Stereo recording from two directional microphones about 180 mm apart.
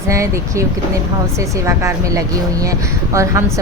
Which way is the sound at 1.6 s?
15° right (ahead or behind).